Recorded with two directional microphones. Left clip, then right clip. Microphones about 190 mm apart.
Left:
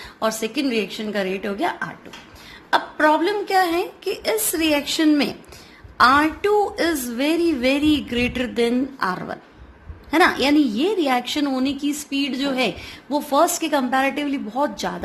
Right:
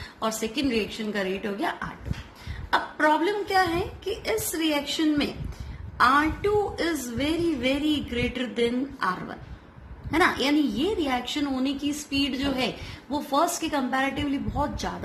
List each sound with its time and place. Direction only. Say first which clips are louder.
0.2 s a woman's voice: left 5 dB; 30° left (ahead or behind)